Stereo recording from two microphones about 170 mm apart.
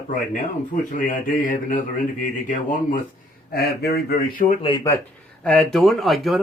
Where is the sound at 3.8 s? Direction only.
65° left (ahead or behind).